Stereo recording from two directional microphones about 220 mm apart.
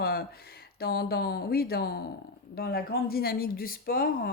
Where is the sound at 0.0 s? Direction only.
45° left (ahead or behind).